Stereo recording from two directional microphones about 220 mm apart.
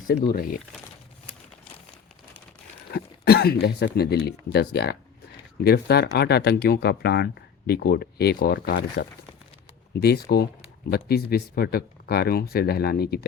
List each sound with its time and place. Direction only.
2.9 s speech: 45° left (ahead or behind)